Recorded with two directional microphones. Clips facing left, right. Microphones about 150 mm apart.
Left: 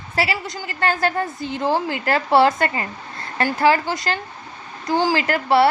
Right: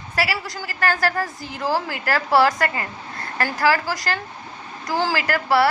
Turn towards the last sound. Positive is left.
turn(degrees=25)  # may be behind; listen again after turning